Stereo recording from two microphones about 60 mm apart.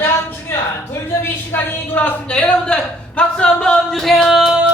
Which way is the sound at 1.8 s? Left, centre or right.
Left.